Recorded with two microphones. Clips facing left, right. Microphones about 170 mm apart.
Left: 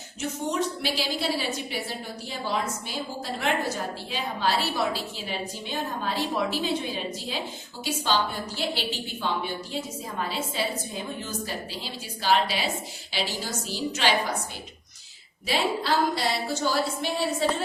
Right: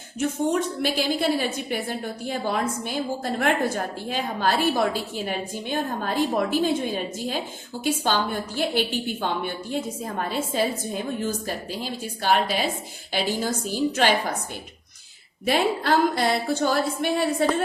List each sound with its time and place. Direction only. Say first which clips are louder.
0.2 s a woman's voice: right 5 dB; 50° right (ahead or behind)
15.4 s a woman's voice: right 4 dB; 55° right (ahead or behind)